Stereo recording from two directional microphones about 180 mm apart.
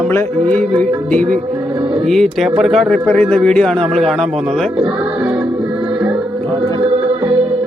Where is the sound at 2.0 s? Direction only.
Centre (ahead or behind).